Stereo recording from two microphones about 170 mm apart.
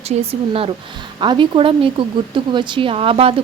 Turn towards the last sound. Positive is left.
turn(degrees=-35)  # may be behind; listen again after turning